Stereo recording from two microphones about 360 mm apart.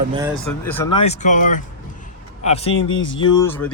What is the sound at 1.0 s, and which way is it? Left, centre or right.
A man's voice, centre.